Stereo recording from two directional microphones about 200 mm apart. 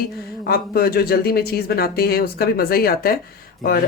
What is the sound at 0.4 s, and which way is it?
Speech, 50° left (ahead or behind).